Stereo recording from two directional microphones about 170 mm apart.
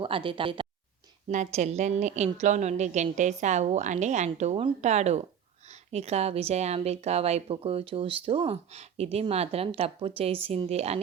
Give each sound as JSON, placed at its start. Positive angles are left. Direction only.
{"t": 0.0, "sound": "speech", "side_deg": -30}
{"t": 1.3, "sound": "a woman's voice", "side_deg": -45}